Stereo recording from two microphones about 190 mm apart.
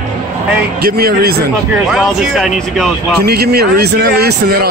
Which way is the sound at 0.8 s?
50° right (ahead or behind).